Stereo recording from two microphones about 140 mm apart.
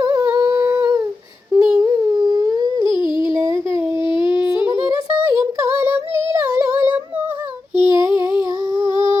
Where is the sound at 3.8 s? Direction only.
15° right (ahead or behind).